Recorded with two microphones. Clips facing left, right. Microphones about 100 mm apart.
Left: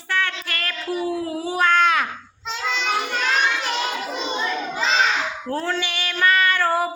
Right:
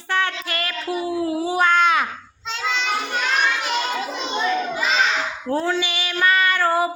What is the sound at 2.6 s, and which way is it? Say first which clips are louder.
Child singing: right 1 dB; centre (ahead or behind).